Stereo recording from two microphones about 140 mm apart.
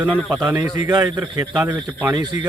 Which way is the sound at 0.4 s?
10° right (ahead or behind).